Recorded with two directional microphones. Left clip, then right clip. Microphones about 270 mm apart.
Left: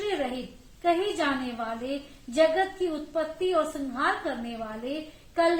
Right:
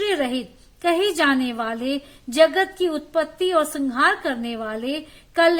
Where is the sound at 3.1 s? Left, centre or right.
Right.